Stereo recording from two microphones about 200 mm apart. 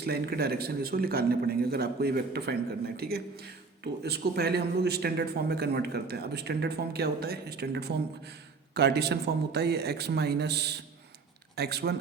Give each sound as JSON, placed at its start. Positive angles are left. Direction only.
{"t": 0.0, "sound": "a man's voice", "side_deg": -50}